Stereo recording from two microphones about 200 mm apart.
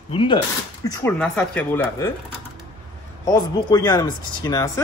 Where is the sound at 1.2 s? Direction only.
5° left (ahead or behind).